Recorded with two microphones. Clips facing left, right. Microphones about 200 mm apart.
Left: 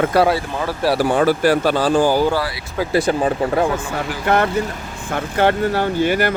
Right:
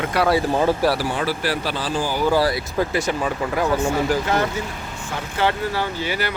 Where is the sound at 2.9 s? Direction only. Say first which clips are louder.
Left 5 dB; 30° left (ahead or behind).